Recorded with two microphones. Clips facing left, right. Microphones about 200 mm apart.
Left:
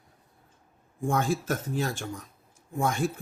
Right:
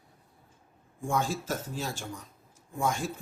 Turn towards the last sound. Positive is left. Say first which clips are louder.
# left 3 dB
turn(degrees=60)  # may be behind; listen again after turning